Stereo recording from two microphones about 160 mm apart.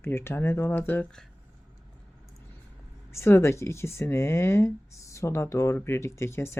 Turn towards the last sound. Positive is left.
turn(degrees=15)  # may be behind; listen again after turning